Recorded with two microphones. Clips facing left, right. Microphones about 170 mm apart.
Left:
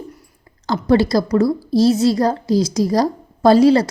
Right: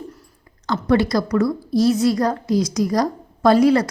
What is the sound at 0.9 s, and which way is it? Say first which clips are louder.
A woman's voice: left 3 dB; 30° left (ahead or behind).